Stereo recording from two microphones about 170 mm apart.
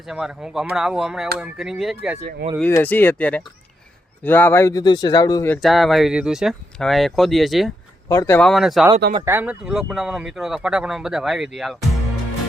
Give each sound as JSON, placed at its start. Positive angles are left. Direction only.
{"t": 0.1, "sound": "speech", "side_deg": -5}
{"t": 2.6, "sound": "speech", "side_deg": 10}
{"t": 5.6, "sound": "speech", "side_deg": 0}
{"t": 8.0, "sound": "speech", "side_deg": 15}
{"t": 8.4, "sound": "speech", "side_deg": 0}